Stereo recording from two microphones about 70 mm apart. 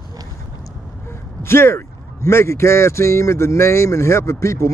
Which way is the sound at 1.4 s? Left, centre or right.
Left.